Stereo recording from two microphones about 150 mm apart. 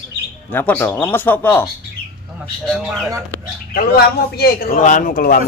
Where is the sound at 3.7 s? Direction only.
90° left; by 5.4 s 70° left (ahead or behind).